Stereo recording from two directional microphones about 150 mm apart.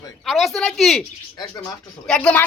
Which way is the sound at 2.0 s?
5° left (ahead or behind).